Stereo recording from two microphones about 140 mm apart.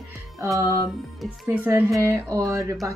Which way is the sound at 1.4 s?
15° right (ahead or behind).